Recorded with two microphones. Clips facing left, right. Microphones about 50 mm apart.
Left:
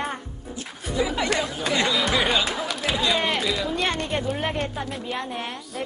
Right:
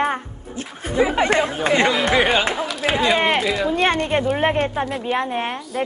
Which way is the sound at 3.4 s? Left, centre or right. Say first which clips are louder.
Right 5 dB; centre.